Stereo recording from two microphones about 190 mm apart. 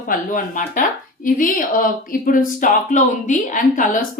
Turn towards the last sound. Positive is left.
turn(degrees=45)  # may be behind; listen again after turning